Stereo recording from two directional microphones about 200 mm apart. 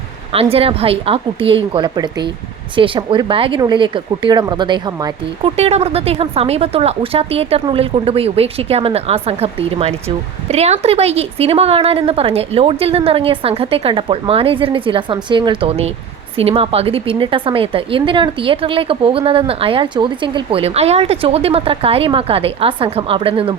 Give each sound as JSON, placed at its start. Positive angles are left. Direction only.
{"t": 0.3, "sound": "speech", "side_deg": -30}
{"t": 5.5, "sound": "speech", "side_deg": -30}